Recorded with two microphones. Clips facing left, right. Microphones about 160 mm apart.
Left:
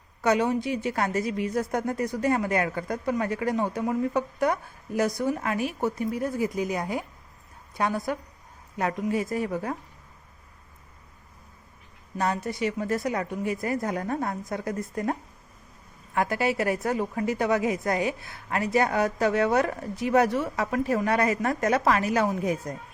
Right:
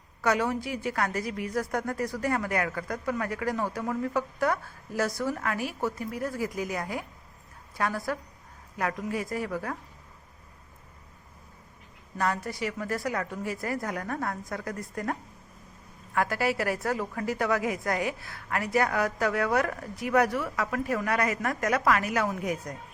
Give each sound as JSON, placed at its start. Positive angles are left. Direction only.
{"t": 0.2, "sound": "a woman's voice", "side_deg": 20}
{"t": 12.1, "sound": "a woman's voice", "side_deg": 20}